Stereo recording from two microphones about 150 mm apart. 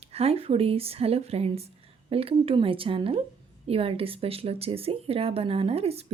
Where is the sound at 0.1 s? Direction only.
40° right (ahead or behind).